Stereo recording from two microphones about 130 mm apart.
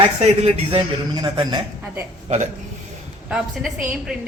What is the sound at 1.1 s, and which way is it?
Speech, 35° right (ahead or behind).